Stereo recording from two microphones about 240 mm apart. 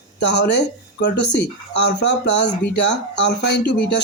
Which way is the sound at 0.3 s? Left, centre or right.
Left.